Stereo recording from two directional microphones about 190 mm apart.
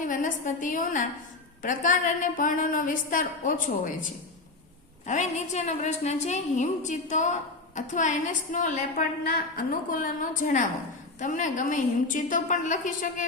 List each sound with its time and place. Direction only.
0.0 s a woman's voice: 45° left (ahead or behind)
5.0 s a woman's voice: 40° left (ahead or behind)